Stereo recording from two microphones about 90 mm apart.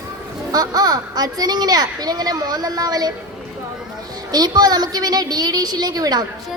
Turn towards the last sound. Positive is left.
turn(degrees=-45)  # may be behind; listen again after turning